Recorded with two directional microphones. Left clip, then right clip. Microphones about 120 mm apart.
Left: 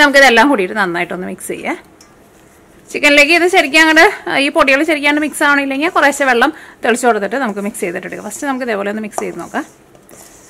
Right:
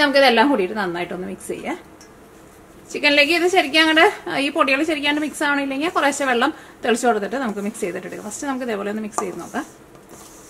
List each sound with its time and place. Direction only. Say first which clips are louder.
0.0 s a woman's voice: left 7 dB; 40° left (ahead or behind)
2.9 s a woman's voice: left 7 dB; 30° left (ahead or behind)